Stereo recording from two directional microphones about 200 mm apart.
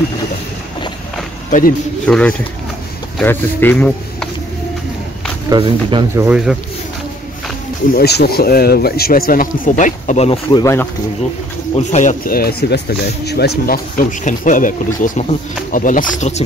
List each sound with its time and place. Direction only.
2.0 s speech: 5° left (ahead or behind)
5.5 s speech: 25° right (ahead or behind)
6.1 s speech: 5° right (ahead or behind)
7.9 s speech: 55° left (ahead or behind); by 10.6 s 30° left (ahead or behind)
10.6 s speech: 15° left (ahead or behind)
11.7 s speech: 35° left (ahead or behind)